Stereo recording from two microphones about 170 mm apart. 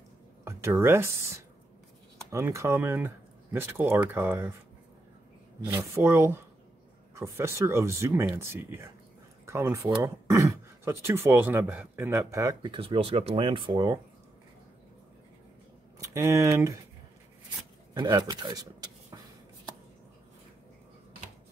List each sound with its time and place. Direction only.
0.5 s speech: 15° right (ahead or behind)
5.7 s speech: 15° right (ahead or behind)
16.0 s speech: 15° right (ahead or behind)
17.9 s speech: 25° right (ahead or behind)